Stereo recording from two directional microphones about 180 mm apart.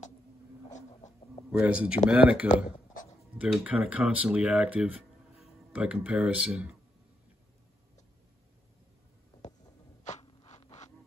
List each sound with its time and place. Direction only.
1.5 s speech: 5° right (ahead or behind)
10.2 s scrape: 35° left (ahead or behind)